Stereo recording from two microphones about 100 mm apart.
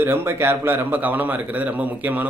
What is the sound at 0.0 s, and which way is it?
A man's voice, 20° right (ahead or behind).